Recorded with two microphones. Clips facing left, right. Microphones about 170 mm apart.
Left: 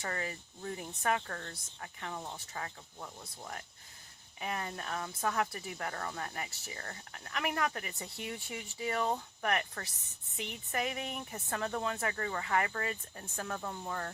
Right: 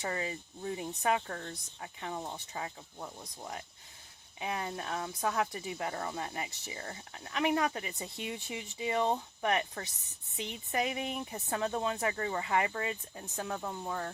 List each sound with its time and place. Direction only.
0.0 s speech: 20° right (ahead or behind)